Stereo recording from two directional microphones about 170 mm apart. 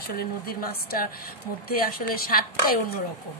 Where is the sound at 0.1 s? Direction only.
60° left (ahead or behind).